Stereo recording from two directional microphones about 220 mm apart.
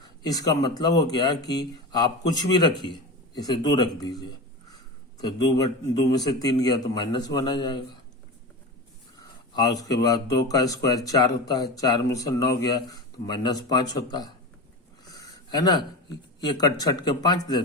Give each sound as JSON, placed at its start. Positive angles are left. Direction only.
{"t": 0.0, "sound": "a man's voice", "side_deg": 15}
{"t": 9.1, "sound": "speech", "side_deg": 15}